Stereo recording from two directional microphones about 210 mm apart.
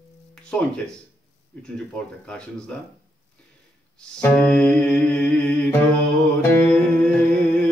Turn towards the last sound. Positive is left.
turn(degrees=5)  # may be behind; listen again after turning